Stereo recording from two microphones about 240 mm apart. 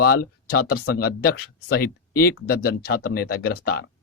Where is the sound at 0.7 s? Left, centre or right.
Left.